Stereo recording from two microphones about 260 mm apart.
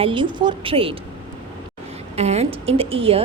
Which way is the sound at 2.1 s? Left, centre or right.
Right.